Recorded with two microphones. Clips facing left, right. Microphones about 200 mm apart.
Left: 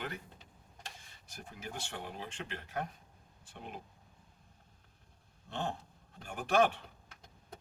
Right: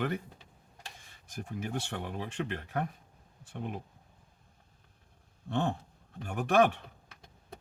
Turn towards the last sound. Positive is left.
turn(degrees=-60)  # may be behind; listen again after turning